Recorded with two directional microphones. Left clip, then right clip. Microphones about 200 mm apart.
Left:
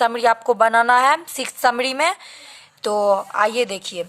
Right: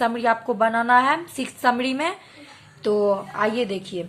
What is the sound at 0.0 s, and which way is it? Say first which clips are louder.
A woman's voice: left 4 dB; 40° left (ahead or behind).